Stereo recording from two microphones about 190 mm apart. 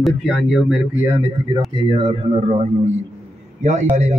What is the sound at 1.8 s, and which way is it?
Speech, 25° right (ahead or behind).